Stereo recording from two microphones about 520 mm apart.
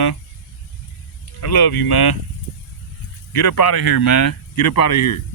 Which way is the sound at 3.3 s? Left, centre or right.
Left.